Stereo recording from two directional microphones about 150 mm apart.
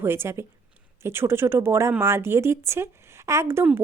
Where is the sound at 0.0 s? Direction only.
15° right (ahead or behind).